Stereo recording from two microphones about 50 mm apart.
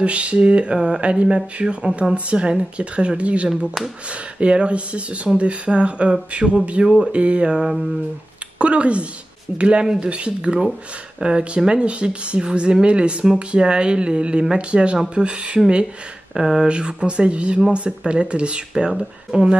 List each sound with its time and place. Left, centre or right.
0.0 s speech: right
0.7 s speech: centre
3.4 s speech: centre
4.1 s speech: right
7.5 s speech: centre
8.5 s speech: right